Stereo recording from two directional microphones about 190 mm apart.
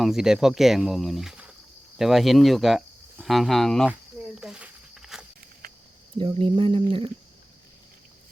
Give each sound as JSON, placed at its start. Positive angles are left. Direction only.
{"t": 0.0, "sound": "speech", "side_deg": 0}
{"t": 4.4, "sound": "insect", "side_deg": -5}
{"t": 6.1, "sound": "speech", "side_deg": -25}